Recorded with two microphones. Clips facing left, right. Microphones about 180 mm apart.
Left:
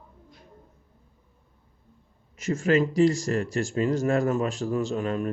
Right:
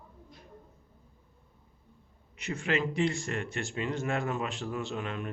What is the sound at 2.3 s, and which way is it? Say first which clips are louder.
Speech: left 9 dB; 45° left (ahead or behind).